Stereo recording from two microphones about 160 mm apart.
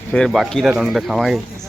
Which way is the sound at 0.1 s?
Centre (ahead or behind).